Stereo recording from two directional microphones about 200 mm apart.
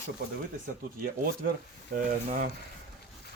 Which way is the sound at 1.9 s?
50° right (ahead or behind).